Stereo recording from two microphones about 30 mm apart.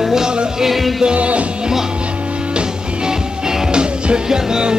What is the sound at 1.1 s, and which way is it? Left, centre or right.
Music, right.